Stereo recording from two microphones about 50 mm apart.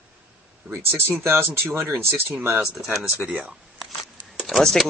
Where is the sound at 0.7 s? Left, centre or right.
Right.